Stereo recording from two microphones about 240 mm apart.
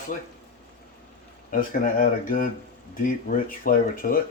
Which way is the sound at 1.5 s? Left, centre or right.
Left.